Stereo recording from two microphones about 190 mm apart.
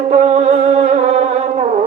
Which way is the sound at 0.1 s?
35° right (ahead or behind).